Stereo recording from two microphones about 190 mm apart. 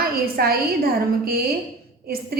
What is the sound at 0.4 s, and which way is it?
A woman's voice, 55° right (ahead or behind).